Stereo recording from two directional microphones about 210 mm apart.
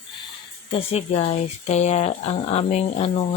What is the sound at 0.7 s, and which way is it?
Speech, 30° left (ahead or behind).